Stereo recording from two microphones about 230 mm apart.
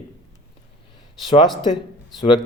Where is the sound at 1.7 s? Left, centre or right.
Centre.